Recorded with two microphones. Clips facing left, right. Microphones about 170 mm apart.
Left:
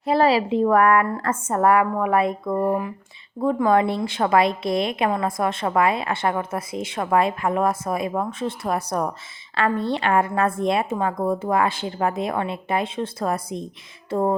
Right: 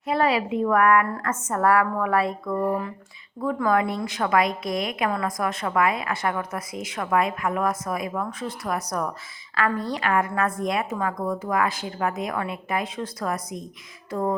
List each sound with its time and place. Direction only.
0.0 s a woman's voice: 30° left (ahead or behind)